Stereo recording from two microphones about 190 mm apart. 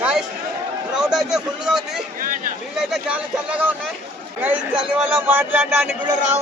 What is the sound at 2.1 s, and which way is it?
Speech, 45° right (ahead or behind).